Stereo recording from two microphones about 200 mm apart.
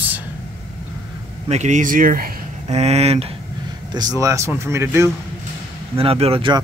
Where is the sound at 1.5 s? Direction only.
35° right (ahead or behind).